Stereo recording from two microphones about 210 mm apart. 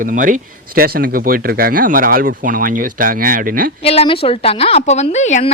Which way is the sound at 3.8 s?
30° left (ahead or behind).